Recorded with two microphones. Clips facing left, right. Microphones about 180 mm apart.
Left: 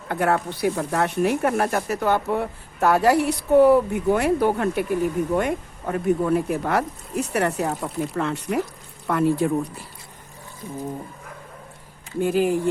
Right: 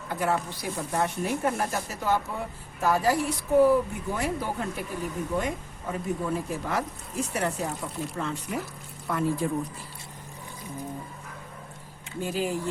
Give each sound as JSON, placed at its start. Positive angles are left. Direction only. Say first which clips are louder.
{"t": 0.1, "sound": "speech", "louder": "left 6 dB", "side_deg": 60}
{"t": 12.2, "sound": "speech", "louder": "left 9 dB", "side_deg": 55}